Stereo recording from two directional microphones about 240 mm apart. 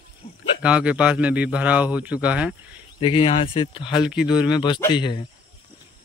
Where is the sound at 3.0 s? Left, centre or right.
Left.